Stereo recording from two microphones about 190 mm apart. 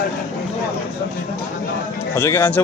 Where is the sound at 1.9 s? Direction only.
10° left (ahead or behind).